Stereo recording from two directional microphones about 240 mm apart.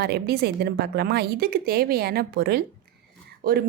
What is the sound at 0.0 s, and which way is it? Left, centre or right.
A woman's voice, right.